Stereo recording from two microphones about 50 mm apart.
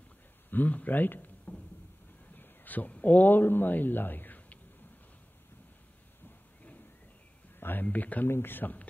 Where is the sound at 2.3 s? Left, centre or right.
Left.